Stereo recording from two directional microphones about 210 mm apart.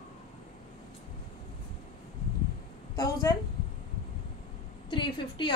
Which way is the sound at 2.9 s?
15° left (ahead or behind).